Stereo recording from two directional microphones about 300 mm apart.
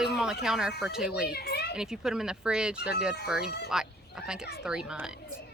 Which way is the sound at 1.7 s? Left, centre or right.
Centre.